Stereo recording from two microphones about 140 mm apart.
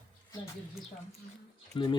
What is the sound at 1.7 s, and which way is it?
Speech, 35° left (ahead or behind).